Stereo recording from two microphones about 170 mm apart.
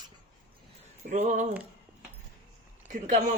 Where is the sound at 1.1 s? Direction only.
45° right (ahead or behind).